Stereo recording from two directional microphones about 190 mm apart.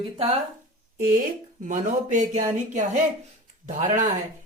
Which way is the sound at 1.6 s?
45° right (ahead or behind).